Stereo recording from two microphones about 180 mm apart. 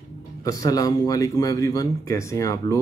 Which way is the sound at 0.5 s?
20° left (ahead or behind).